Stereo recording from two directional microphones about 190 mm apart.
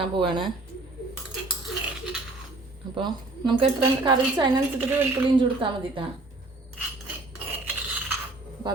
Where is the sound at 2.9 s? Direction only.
25° right (ahead or behind).